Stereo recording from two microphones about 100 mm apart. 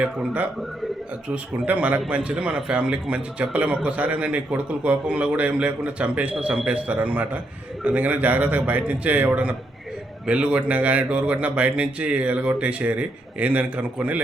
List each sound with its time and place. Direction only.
0.0 s speech: 10° right (ahead or behind)